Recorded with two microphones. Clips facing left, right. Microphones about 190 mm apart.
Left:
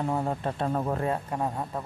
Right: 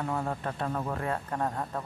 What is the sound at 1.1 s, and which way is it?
Speech, 10° left (ahead or behind).